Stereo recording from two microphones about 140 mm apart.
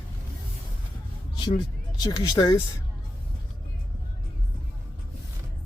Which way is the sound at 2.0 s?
30° left (ahead or behind).